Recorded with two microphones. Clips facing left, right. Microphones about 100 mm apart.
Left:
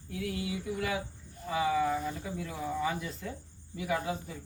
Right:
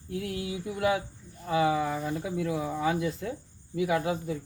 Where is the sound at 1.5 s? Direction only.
60° right (ahead or behind).